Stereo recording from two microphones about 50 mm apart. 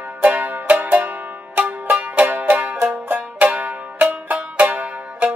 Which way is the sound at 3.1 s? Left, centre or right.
Right.